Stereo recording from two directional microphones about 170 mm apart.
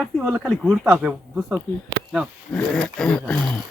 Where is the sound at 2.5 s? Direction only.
5° left (ahead or behind).